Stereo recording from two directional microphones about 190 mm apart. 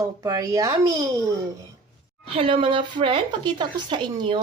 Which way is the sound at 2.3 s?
30° right (ahead or behind).